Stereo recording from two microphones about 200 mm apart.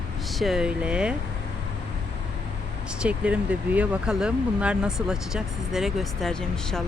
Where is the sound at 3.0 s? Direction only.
5° right (ahead or behind).